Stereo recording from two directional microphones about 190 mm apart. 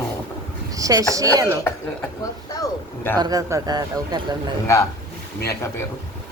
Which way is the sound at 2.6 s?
10° left (ahead or behind).